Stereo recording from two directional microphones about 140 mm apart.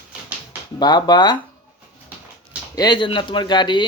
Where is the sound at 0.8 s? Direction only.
30° left (ahead or behind).